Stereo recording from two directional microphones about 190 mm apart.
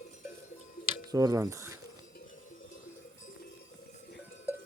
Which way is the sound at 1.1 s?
20° right (ahead or behind).